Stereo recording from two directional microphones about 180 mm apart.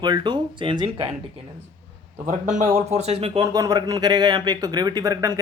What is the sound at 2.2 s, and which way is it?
Speech, 40° right (ahead or behind).